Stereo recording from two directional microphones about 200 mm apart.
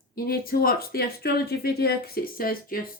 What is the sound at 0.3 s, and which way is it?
Speech, 50° left (ahead or behind).